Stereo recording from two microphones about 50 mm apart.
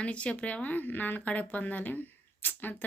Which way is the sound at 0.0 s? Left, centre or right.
Left.